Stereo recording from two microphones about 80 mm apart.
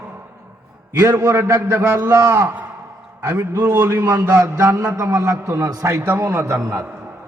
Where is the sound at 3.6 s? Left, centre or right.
Right.